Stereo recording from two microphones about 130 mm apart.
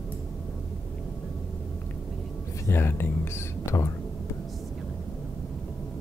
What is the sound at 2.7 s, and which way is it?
Speech, 15° left (ahead or behind).